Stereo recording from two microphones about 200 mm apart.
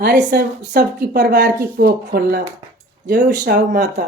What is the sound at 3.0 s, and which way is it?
Speech, 35° right (ahead or behind).